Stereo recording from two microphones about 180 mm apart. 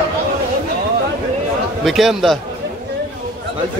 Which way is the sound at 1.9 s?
Centre (ahead or behind).